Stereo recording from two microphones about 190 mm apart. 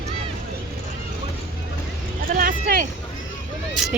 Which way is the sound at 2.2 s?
45° right (ahead or behind).